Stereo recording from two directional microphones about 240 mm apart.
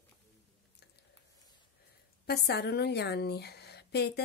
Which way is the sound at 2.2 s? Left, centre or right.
Left.